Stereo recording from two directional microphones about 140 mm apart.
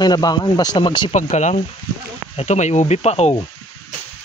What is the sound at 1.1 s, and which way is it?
Speech, 55° left (ahead or behind).